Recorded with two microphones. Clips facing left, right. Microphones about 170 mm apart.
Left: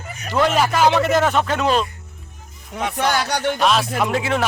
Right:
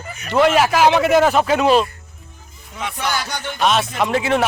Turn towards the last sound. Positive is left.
turn(degrees=0)  # may be behind; listen again after turning